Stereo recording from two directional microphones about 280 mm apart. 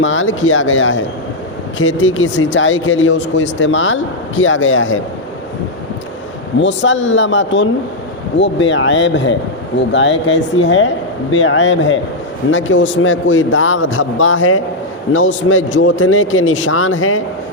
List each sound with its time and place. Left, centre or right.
0.0 s speech: left
6.6 s a man's voice: left